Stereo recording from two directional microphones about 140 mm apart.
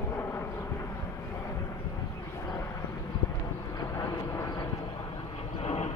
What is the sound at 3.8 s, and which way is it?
Vehicle, 25° left (ahead or behind).